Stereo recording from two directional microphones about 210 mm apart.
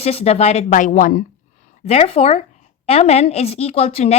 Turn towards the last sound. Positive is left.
turn(degrees=30)  # may be behind; listen again after turning